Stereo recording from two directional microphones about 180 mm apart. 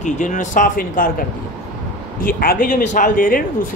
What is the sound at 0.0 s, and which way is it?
Speech, 45° left (ahead or behind).